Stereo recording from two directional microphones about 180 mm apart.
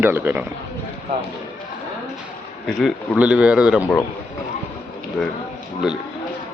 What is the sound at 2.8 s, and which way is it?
Speech, centre (ahead or behind).